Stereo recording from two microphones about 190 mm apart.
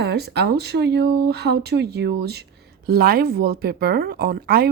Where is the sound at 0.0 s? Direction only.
60° right (ahead or behind).